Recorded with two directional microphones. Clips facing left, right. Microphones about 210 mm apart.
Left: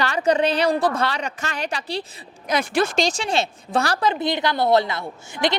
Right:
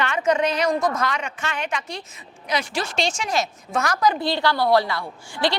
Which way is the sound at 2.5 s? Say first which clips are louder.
Left 5 dB; 50° left (ahead or behind).